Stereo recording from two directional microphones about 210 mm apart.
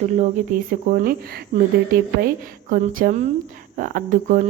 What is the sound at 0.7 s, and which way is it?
Speech, 45° right (ahead or behind).